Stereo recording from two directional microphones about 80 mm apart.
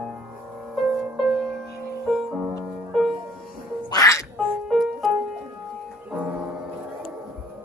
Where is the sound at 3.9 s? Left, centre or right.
Left.